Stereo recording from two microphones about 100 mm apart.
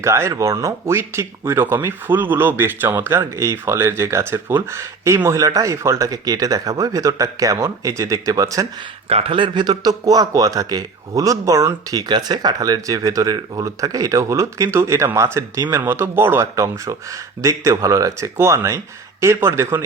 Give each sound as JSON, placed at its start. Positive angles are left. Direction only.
{"t": 0.0, "sound": "speech", "side_deg": -30}
{"t": 9.0, "sound": "speech", "side_deg": -75}